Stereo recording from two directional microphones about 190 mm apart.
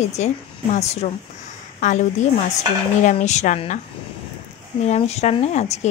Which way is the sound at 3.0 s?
40° left (ahead or behind).